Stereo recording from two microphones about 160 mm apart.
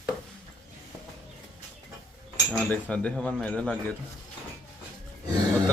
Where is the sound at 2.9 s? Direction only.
5° left (ahead or behind).